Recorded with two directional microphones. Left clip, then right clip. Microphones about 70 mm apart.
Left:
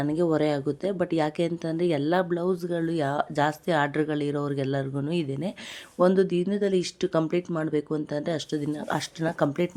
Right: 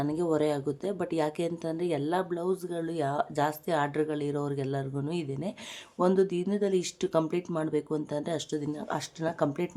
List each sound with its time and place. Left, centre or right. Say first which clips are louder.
0.0 s speech: left 3 dB; left
1.7 s speech: left 6 dB; left
6.0 s speech: left 4 dB; left
8.9 s speech: left 3 dB; left